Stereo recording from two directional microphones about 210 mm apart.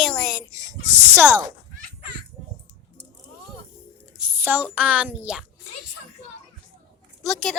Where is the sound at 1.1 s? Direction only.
10° right (ahead or behind).